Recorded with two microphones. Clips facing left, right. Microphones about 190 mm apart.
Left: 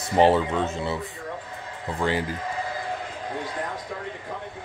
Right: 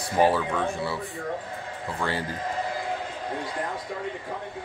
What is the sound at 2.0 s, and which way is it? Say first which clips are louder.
Speech: left 4 dB; 15° left (ahead or behind).